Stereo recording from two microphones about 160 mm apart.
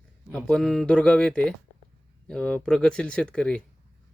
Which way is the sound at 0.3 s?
5° left (ahead or behind).